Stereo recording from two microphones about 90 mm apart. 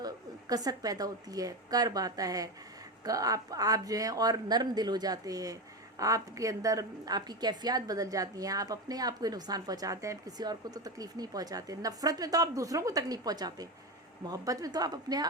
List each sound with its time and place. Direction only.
0.0 s a woman's voice: 45° right (ahead or behind)